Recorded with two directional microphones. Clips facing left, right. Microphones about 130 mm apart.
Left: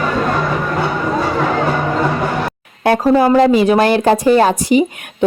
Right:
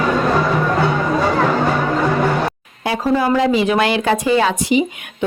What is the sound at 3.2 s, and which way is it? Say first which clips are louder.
Speech: left 4 dB; 45° left (ahead or behind).